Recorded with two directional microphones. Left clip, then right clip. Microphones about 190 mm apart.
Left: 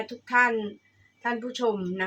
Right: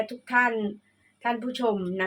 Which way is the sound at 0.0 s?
40° right (ahead or behind).